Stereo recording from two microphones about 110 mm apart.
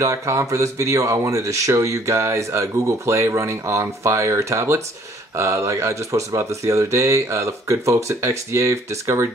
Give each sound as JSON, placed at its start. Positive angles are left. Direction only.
{"t": 0.0, "sound": "speech", "side_deg": -25}